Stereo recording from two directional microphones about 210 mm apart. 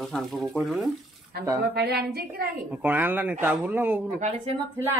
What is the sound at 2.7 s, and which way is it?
Speech, 10° right (ahead or behind).